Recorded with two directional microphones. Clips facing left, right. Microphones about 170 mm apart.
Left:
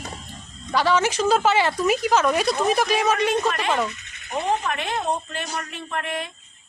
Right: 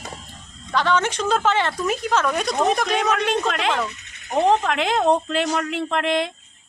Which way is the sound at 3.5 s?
85° right.